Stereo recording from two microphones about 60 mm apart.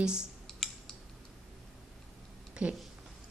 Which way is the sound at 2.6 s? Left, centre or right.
Right.